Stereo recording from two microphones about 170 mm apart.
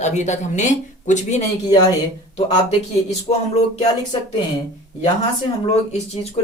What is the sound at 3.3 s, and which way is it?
Speech, 40° left (ahead or behind).